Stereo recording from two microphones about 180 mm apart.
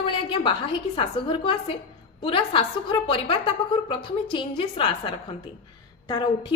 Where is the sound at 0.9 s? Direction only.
30° left (ahead or behind).